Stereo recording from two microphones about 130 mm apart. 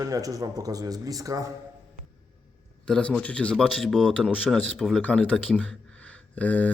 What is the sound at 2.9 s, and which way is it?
Speech, 10° left (ahead or behind).